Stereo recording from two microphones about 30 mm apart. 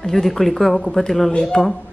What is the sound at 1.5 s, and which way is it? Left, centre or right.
Speech, left.